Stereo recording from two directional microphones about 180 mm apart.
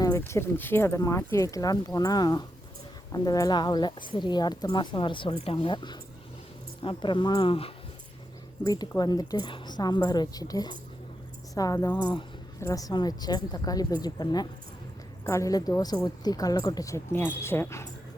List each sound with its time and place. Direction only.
0.0 s a woman's voice: 15° left (ahead or behind)